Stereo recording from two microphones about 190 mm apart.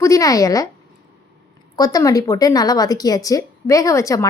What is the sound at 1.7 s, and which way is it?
A woman's voice, 20° left (ahead or behind).